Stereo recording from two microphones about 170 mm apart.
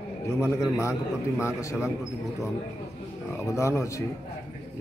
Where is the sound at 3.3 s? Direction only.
15° left (ahead or behind).